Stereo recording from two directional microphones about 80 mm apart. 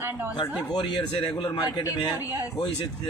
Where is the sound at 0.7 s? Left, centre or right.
Left.